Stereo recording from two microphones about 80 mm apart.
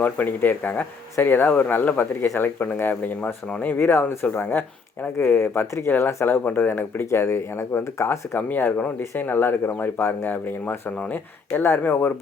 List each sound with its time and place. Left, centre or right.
0.0 s speech: left
2.9 s speech: centre; by 8.4 s left
8.4 s speech: left